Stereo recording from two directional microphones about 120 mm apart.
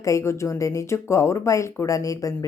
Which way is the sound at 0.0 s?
25° left (ahead or behind).